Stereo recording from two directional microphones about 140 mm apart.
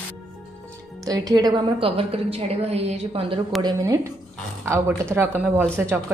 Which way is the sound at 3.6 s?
30° right (ahead or behind).